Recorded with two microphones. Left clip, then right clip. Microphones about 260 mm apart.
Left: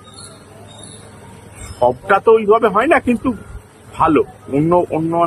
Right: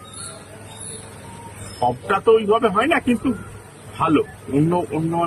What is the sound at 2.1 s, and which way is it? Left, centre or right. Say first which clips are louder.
Speech: left 4 dB; centre.